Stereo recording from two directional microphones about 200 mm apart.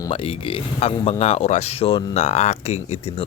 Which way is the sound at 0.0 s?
25° left (ahead or behind).